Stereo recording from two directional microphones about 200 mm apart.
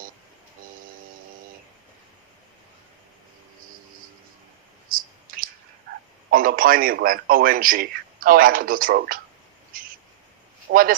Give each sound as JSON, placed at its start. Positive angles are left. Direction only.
{"t": 4.9, "sound": "clicking", "side_deg": -45}
{"t": 5.9, "sound": "a sound", "side_deg": -55}
{"t": 6.3, "sound": "a man's voice", "side_deg": -45}
{"t": 9.7, "sound": "owl", "side_deg": -45}
{"t": 10.7, "sound": "speech", "side_deg": -45}